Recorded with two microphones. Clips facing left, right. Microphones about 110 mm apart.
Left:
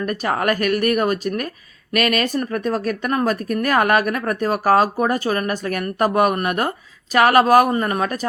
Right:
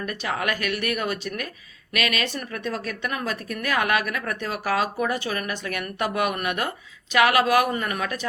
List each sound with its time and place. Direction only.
0.0 s speech: 45° left (ahead or behind)